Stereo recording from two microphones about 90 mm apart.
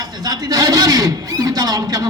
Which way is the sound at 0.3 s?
45° right (ahead or behind).